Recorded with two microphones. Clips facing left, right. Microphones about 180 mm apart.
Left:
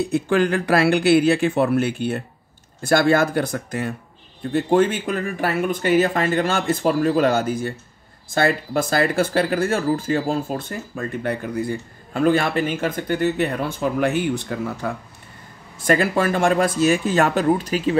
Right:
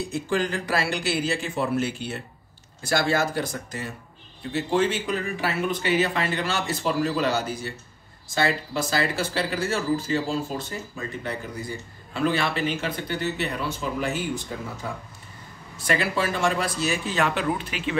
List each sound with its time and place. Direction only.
0.1 s speech: 60° left (ahead or behind)
15.9 s speech: 50° left (ahead or behind)